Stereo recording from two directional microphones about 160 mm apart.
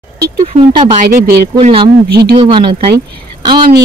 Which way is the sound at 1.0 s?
80° right.